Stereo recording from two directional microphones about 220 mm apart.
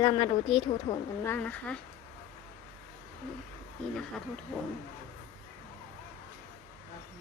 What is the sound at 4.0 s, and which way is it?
Speech, centre (ahead or behind).